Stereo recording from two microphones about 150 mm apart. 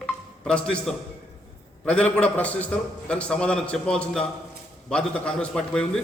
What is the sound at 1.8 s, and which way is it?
A man's voice, 10° left (ahead or behind).